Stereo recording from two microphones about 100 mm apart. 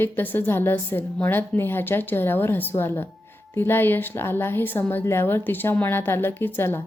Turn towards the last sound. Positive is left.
turn(degrees=20)  # may be behind; listen again after turning